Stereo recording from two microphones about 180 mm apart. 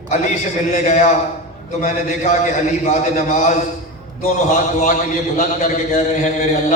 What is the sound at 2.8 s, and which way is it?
Speech, 40° left (ahead or behind).